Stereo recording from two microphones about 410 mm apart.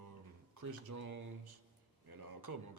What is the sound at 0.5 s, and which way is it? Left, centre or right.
A man's voice, right.